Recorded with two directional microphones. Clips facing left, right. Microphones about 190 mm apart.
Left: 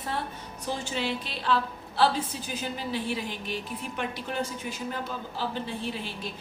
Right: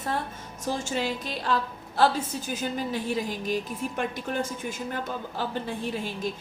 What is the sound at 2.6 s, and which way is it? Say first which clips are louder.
A woman's voice: right 1 dB; 45° right (ahead or behind).